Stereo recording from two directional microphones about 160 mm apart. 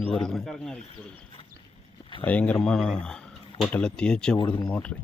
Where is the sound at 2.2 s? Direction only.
10° left (ahead or behind).